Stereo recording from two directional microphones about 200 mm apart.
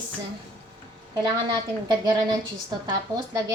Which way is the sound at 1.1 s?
20° right (ahead or behind).